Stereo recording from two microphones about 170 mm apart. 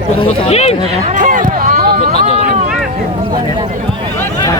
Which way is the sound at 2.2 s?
45° right (ahead or behind).